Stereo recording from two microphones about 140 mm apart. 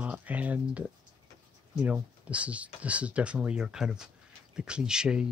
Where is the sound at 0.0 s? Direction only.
10° right (ahead or behind).